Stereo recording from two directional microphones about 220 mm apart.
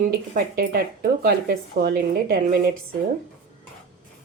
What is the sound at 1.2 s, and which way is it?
Speech, 40° right (ahead or behind).